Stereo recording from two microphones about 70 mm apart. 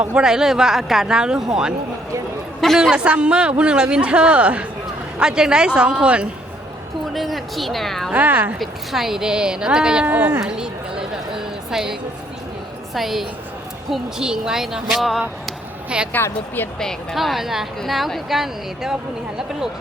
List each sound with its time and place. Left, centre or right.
0.0 s speech: centre
0.3 s speech: centre
2.9 s speech: centre
7.1 s speech: centre
8.1 s speech: right
8.5 s speech: centre
10.1 s speech: right
10.4 s a sound: centre
12.9 s speech: centre
16.1 s speech: left
17.2 s speech: centre